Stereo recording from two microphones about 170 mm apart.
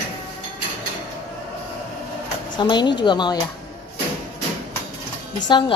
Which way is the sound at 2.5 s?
25° left (ahead or behind).